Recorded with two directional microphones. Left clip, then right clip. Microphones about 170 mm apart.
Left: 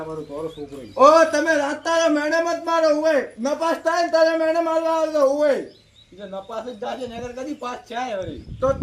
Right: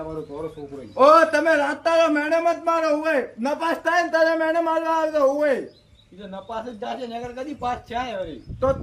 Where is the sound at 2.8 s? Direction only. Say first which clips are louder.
Left 3 dB; 25° right (ahead or behind).